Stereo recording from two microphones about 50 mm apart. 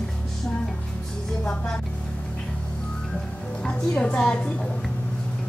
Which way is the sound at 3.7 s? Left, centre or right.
Centre.